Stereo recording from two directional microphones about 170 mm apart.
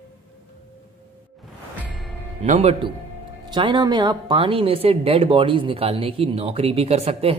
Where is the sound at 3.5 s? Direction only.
25° right (ahead or behind).